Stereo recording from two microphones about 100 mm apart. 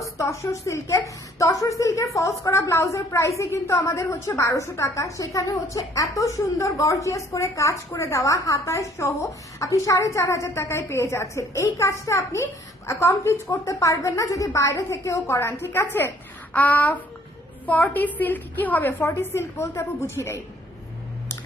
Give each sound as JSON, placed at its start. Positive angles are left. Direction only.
{"t": 0.0, "sound": "a woman's voice", "side_deg": 30}